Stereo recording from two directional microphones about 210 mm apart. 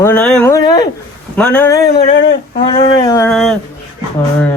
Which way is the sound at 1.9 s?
55° left (ahead or behind).